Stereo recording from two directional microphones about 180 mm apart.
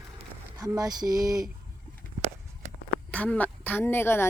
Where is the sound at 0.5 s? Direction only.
20° right (ahead or behind).